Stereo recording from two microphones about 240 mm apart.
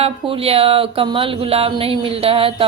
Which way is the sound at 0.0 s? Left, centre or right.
Right.